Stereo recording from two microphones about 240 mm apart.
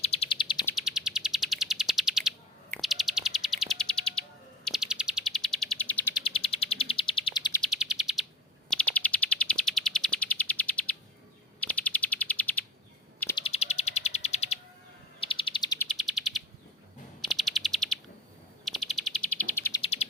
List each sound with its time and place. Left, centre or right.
0.0 s bird: left
0.6 s bird: centre
6.2 s bird: left
7.6 s bird: centre
8.7 s chirp: centre
11.6 s bird: centre
13.4 s bird: left
15.9 s bird: centre
19.8 s bird: left